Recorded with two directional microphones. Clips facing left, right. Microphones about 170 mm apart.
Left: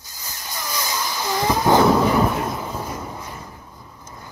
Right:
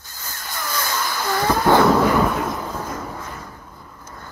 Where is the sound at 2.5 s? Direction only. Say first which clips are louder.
Right 1 dB; 10° left (ahead or behind).